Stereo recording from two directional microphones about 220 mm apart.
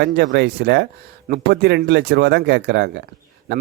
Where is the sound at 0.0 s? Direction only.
50° right (ahead or behind).